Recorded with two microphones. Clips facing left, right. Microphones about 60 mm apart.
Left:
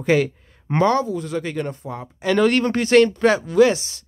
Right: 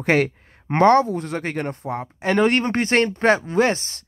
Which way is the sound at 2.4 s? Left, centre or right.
Right.